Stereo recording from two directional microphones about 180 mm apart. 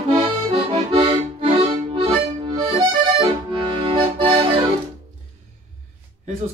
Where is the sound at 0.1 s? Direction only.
30° right (ahead or behind).